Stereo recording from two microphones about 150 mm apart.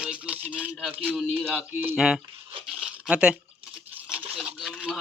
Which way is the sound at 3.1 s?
5° right (ahead or behind).